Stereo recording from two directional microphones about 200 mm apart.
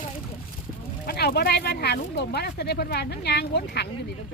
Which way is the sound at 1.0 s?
50° left (ahead or behind).